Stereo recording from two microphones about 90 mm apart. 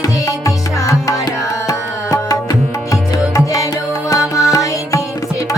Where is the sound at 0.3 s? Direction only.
40° left (ahead or behind).